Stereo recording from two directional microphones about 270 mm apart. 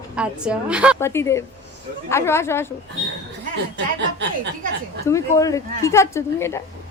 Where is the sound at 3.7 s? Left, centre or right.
Right.